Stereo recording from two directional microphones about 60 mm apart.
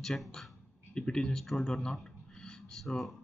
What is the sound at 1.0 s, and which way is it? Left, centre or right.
Speech, centre.